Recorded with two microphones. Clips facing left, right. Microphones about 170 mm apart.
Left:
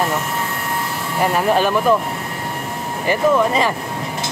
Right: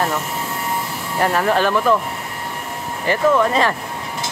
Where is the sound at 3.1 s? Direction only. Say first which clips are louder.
Even; 10° left (ahead or behind).